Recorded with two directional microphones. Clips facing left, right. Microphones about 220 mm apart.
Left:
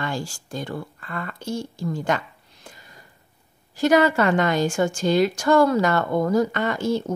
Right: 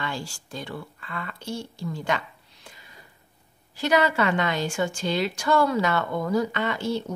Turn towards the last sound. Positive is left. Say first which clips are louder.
# left 4 dB
turn(degrees=45)  # may be behind; listen again after turning